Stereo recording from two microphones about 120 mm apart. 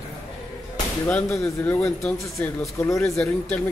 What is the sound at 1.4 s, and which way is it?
Speech, 20° left (ahead or behind).